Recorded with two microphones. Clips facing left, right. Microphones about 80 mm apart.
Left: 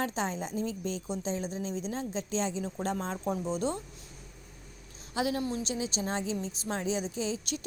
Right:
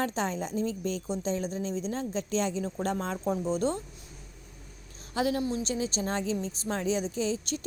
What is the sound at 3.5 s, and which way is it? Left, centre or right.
Speech, right.